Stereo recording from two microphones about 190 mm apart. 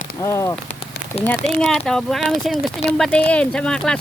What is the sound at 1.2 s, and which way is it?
Speech, 5° left (ahead or behind).